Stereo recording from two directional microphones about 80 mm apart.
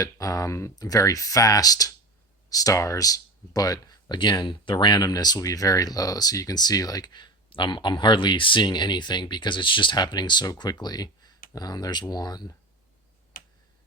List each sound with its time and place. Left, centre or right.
0.0 s speech: left